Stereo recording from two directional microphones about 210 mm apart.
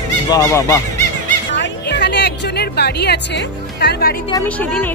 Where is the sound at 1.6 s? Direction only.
55° left (ahead or behind).